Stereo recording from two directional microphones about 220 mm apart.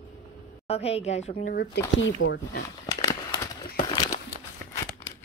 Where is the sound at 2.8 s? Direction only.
15° left (ahead or behind).